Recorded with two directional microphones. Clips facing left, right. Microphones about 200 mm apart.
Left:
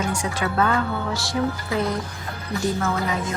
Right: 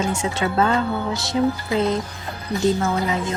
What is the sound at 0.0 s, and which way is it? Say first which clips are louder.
Speech: right 3 dB; 25° right (ahead or behind).